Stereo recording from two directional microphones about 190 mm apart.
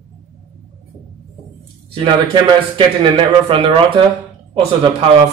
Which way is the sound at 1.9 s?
25° right (ahead or behind).